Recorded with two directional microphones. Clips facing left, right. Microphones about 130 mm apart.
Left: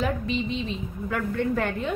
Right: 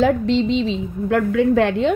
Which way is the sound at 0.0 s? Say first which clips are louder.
Right 10 dB; 90° right.